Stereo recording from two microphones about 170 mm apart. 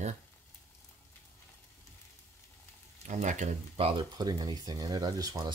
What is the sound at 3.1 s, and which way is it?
Speech, 45° right (ahead or behind).